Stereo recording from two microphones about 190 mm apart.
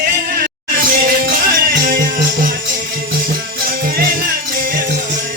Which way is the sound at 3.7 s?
50° right (ahead or behind).